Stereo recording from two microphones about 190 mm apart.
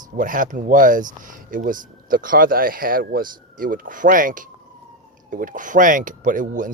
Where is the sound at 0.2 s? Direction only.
45° right (ahead or behind).